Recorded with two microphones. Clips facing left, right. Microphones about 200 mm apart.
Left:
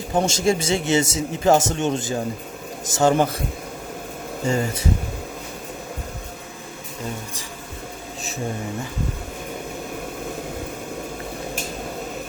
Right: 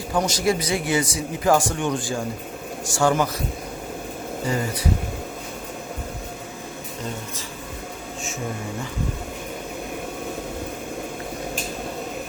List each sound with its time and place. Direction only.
0.1 s speech: 25° left (ahead or behind)
4.4 s speech: 25° left (ahead or behind)